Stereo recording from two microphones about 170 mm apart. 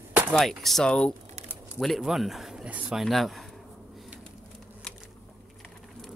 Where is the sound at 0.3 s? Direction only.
Centre (ahead or behind).